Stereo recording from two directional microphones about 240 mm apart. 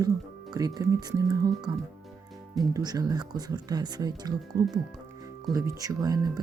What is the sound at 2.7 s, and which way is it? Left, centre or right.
Speech, centre.